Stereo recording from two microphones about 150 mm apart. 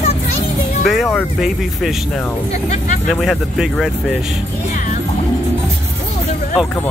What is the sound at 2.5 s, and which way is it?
Speech, 50° left (ahead or behind).